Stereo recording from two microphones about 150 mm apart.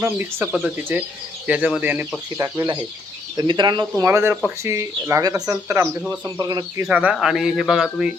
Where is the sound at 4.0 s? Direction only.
20° right (ahead or behind).